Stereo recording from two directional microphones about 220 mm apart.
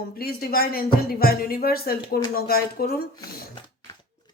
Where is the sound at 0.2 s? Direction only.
45° left (ahead or behind).